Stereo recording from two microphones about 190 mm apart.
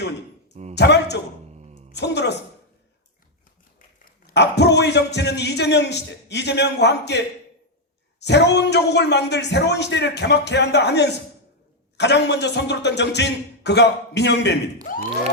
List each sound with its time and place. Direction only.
0.8 s a sound: 65° left (ahead or behind)
1.9 s a man's voice: 60° left (ahead or behind)
4.0 s dog: 45° left (ahead or behind)
4.5 s speech: 65° left (ahead or behind)
8.2 s speech: 65° left (ahead or behind)